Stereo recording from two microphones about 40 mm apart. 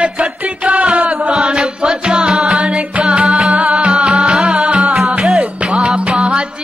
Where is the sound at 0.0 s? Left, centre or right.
Right.